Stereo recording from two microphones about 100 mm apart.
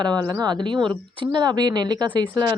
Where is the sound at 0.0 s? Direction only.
40° right (ahead or behind).